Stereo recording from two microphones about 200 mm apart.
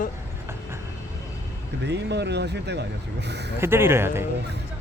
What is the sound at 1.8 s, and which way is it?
Speech, 60° right (ahead or behind).